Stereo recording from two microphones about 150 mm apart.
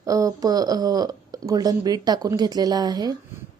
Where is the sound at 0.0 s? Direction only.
20° right (ahead or behind).